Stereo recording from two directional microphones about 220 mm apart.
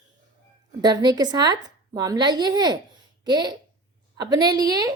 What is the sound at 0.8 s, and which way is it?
A woman's voice, 20° right (ahead or behind).